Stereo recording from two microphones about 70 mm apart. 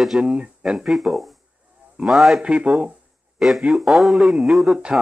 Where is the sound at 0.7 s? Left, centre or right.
Centre.